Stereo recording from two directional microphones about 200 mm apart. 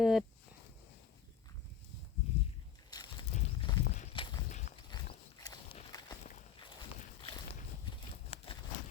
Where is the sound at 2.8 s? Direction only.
20° left (ahead or behind).